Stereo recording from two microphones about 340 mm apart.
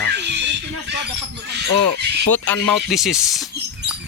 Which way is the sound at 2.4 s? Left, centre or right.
Centre.